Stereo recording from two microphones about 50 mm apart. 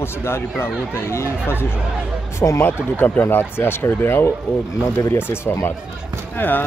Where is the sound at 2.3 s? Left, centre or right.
Left.